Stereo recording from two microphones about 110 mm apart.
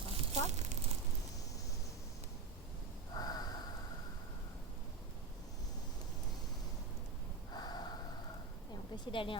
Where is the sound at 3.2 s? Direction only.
35° left (ahead or behind).